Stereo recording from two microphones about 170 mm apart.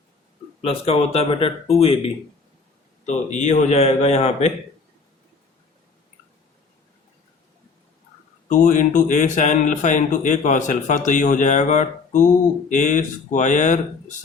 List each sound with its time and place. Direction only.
0.6 s a man's voice: 35° left (ahead or behind)
3.1 s a man's voice: 45° left (ahead or behind)
8.4 s speech: 45° left (ahead or behind)